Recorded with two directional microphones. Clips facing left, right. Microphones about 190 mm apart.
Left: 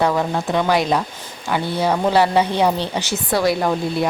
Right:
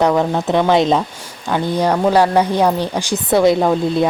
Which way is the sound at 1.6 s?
15° right (ahead or behind).